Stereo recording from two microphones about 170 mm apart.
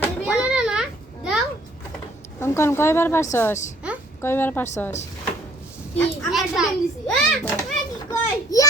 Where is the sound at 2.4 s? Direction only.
15° left (ahead or behind).